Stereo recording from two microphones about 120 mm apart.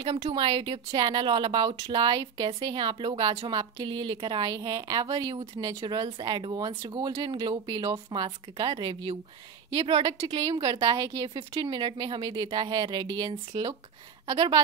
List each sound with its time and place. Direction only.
0.0 s a woman's voice: 45° right (ahead or behind)
11.3 s a woman's voice: 40° right (ahead or behind)